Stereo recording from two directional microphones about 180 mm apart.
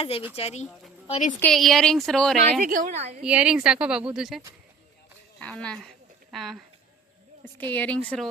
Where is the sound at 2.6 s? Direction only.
50° right (ahead or behind).